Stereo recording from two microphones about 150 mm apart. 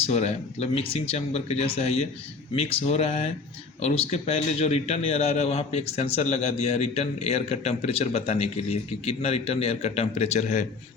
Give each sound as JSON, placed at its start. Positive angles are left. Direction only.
{"t": 0.1, "sound": "a man's voice", "side_deg": 45}